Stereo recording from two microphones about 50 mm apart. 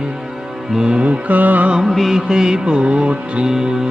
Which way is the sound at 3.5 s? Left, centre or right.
Centre.